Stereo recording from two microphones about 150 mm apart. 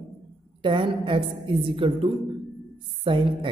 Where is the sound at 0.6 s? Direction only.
35° right (ahead or behind).